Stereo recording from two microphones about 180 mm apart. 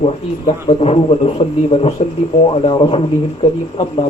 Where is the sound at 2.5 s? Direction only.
30° left (ahead or behind).